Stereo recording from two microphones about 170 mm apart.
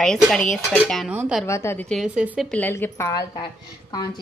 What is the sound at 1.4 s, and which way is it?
Dishes, 15° left (ahead or behind).